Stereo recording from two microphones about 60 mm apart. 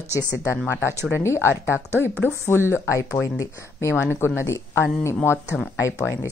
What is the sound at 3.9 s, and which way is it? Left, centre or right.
Speech, left.